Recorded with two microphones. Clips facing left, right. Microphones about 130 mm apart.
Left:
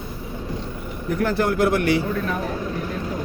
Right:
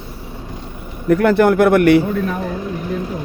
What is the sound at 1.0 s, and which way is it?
Speech, 80° right.